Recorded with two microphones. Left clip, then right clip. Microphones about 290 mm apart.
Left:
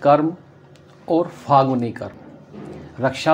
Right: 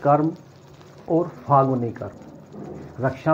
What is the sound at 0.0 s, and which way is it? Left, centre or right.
Speech, left.